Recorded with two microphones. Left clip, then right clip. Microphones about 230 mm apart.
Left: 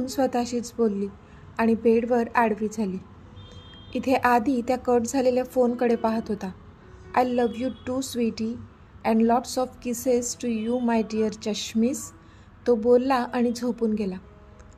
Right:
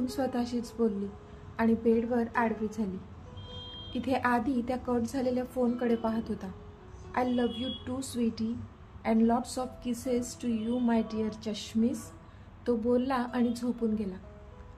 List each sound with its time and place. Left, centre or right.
0.0 s a woman's voice: left
3.9 s a woman's voice: left